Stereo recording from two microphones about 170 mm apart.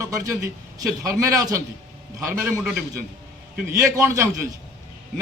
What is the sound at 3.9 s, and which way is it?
Speech, 15° right (ahead or behind).